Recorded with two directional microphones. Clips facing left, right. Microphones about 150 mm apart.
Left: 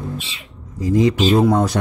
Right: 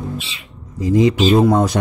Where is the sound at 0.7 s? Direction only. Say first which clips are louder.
Right 2 dB; 20° right (ahead or behind).